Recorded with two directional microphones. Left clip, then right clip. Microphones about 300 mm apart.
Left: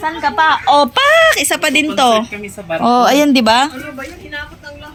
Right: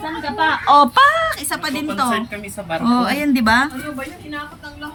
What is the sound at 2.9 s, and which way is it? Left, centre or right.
Speech, left.